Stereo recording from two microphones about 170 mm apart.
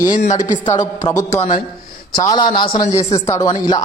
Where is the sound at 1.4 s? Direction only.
50° left (ahead or behind).